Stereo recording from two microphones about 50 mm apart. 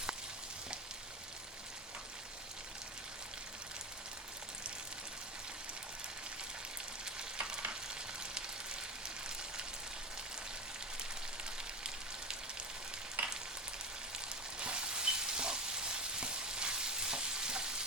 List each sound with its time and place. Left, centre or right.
7.0 s frying: centre
13.2 s frying: right
14.3 s a sound: right